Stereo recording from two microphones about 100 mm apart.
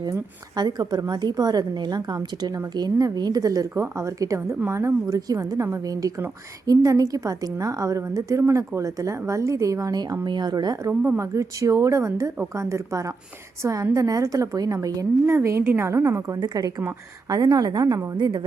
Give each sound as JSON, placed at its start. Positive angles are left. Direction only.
{"t": 0.5, "sound": "a woman's voice", "side_deg": -45}
{"t": 11.0, "sound": "a woman's voice", "side_deg": -30}
{"t": 15.3, "sound": "a woman's voice", "side_deg": -25}
{"t": 18.2, "sound": "a woman's voice", "side_deg": -50}